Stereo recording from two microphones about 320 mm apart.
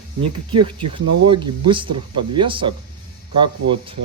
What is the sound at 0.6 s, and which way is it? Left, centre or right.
Speech, centre.